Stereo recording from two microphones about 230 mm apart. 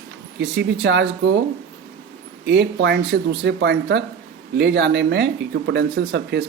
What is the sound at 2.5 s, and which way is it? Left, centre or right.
Speech, right.